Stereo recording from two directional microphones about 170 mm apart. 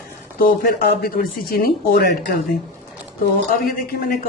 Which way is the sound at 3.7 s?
60° left (ahead or behind).